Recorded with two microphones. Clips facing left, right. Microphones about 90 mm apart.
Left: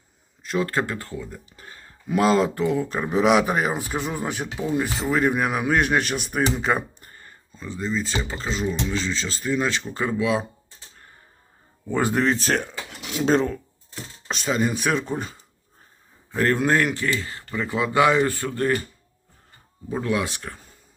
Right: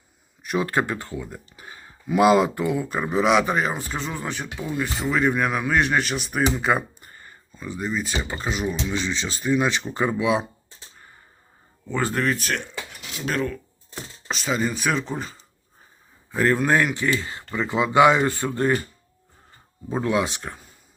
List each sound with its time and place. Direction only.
0.4 s speech: 20° right (ahead or behind)
11.9 s speech: 15° left (ahead or behind)
14.3 s speech: centre (ahead or behind)
16.3 s speech: 5° right (ahead or behind)
19.9 s speech: 25° right (ahead or behind)